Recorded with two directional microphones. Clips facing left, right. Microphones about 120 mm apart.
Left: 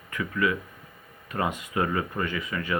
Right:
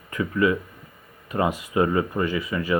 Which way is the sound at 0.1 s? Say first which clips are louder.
Right 5 dB; 25° right (ahead or behind).